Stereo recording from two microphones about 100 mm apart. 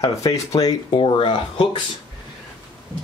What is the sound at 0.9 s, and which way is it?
Speech, 60° left (ahead or behind).